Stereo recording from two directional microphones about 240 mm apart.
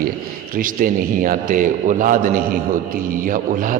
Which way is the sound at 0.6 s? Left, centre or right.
Right.